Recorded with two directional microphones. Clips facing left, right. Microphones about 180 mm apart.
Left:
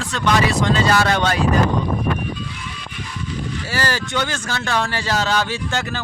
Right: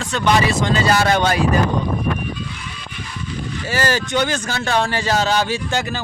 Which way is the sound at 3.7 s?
20° right (ahead or behind).